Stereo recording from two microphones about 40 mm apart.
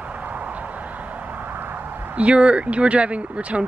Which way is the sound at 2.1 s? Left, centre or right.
Right.